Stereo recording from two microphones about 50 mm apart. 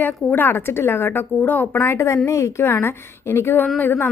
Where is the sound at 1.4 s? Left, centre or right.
Left.